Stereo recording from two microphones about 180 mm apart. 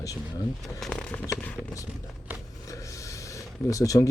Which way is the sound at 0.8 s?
5° left (ahead or behind).